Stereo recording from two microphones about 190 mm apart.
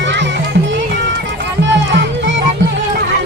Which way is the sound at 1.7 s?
70° right (ahead or behind).